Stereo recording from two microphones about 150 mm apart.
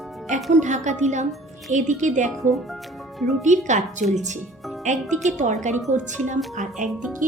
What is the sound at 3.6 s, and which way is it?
Speech, 55° right (ahead or behind).